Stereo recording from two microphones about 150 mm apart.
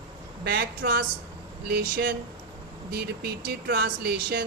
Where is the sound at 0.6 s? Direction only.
80° right.